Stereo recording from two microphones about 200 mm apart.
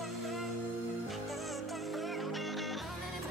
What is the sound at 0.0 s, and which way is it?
Music, centre (ahead or behind).